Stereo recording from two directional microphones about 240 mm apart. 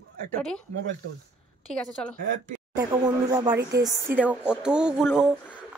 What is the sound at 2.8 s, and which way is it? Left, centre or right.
Speech, centre.